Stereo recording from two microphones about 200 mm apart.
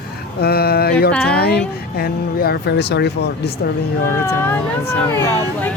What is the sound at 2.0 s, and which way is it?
Speech, 50° left (ahead or behind).